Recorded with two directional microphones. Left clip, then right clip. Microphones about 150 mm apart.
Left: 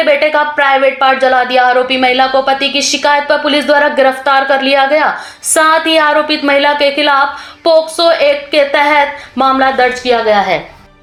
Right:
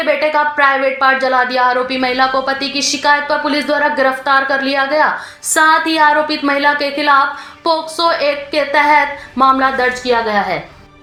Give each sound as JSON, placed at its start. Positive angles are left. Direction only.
{"t": 0.0, "sound": "speech", "side_deg": 15}